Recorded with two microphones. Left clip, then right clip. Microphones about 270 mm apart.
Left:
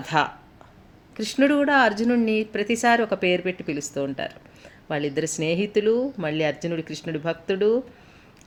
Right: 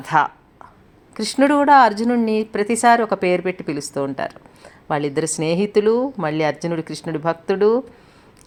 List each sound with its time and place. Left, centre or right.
0.0 s speech: right